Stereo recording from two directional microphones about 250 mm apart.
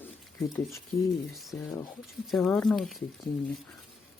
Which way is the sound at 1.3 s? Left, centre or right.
Centre.